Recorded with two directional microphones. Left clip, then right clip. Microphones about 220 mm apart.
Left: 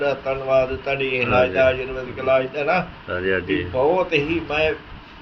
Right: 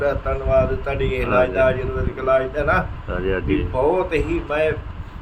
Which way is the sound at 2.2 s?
15° right (ahead or behind).